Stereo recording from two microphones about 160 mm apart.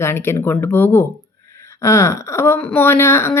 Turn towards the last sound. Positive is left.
turn(degrees=15)  # may be behind; listen again after turning